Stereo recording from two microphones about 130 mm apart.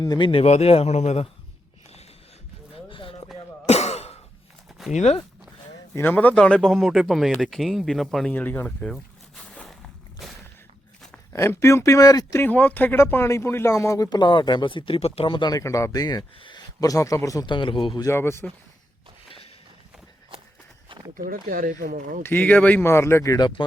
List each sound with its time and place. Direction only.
0.0 s a man's voice: 30° left (ahead or behind)
0.3 s a man's voice: 50° left (ahead or behind)
2.7 s a sound: 45° left (ahead or behind)
3.7 s sigh: 55° left (ahead or behind)
4.9 s speech: 60° left (ahead or behind)
5.9 s speech: 15° left (ahead or behind)
8.3 s zipper: 15° left (ahead or behind)
10.2 s a sound: centre (ahead or behind)
11.3 s speech: 20° left (ahead or behind)
12.4 s speech: 15° left (ahead or behind)
17.4 s a man's voice: 40° left (ahead or behind)
18.0 s speech: 20° left (ahead or behind)
21.2 s speech: 90° right
22.2 s speech: 15° left (ahead or behind)